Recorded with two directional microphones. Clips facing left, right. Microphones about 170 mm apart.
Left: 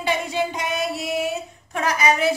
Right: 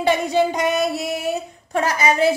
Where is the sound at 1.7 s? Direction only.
30° right (ahead or behind).